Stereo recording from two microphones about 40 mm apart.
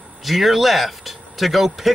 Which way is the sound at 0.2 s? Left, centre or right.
Centre.